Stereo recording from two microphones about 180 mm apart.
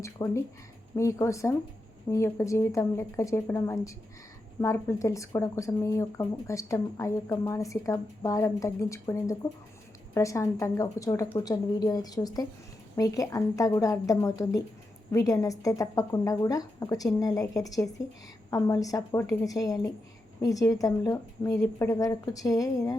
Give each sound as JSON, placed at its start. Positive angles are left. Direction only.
{"t": 0.0, "sound": "speech", "side_deg": 15}